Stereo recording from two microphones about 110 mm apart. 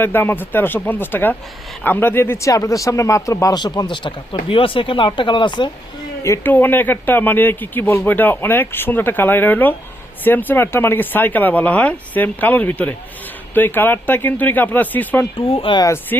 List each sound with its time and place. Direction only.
0.0 s speech: 20° left (ahead or behind)
3.6 s speech: 45° left (ahead or behind)
6.2 s speech: 25° left (ahead or behind)
6.5 s speech: 15° left (ahead or behind)
15.4 s speech: 55° left (ahead or behind)